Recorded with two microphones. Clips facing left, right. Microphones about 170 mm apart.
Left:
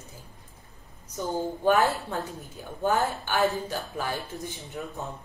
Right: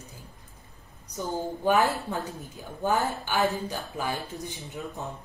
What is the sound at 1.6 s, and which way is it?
Speech, 15° right (ahead or behind).